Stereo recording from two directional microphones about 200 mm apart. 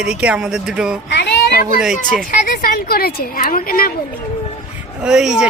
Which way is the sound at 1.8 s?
Centre (ahead or behind).